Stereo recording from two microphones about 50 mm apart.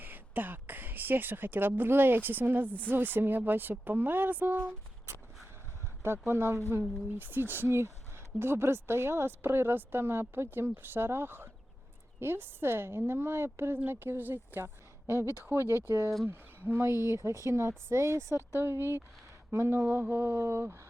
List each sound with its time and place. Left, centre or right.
0.0 s speech: right
2.6 s speech: left
2.9 s speech: right
6.0 s speech: right
7.2 s speech: right
16.2 s speech: right
18.6 s speech: right
19.9 s speech: right
20.4 s speech: right